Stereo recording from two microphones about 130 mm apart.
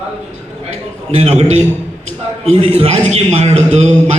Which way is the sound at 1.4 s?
60° right (ahead or behind).